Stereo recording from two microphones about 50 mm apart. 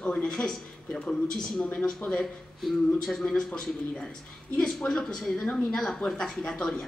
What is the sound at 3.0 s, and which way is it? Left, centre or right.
Speech, centre.